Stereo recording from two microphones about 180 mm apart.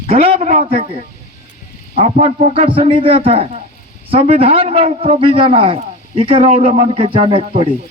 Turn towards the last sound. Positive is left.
turn(degrees=-30)  # may be behind; listen again after turning